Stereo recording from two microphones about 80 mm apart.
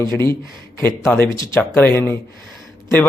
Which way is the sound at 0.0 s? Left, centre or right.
Left.